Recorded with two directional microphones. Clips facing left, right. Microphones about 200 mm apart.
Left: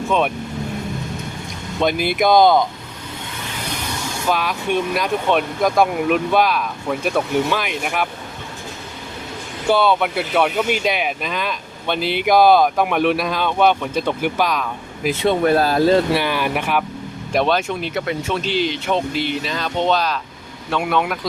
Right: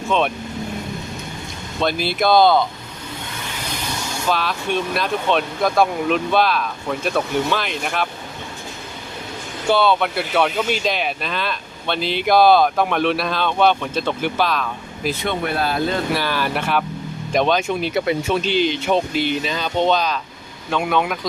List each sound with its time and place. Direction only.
1.8 s speech: 15° left (ahead or behind)
4.3 s speech: 15° left (ahead or behind)
9.6 s speech: 10° left (ahead or behind)
15.2 s speech: 40° left (ahead or behind)
16.1 s speech: 20° left (ahead or behind)
17.3 s speech: 5° left (ahead or behind)
17.7 s speech: 10° right (ahead or behind)
18.4 s speech: centre (ahead or behind)